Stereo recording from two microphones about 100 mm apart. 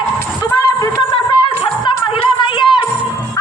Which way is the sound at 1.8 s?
55° left (ahead or behind).